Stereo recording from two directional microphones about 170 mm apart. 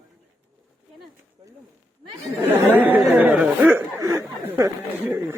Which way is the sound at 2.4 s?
10° right (ahead or behind).